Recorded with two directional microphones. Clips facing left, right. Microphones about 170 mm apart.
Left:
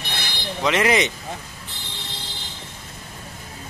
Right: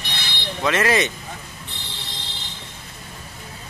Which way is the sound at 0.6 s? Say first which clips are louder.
Even; 20° left (ahead or behind).